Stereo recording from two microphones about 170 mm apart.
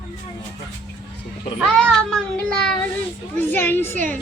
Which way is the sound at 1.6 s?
5° left (ahead or behind).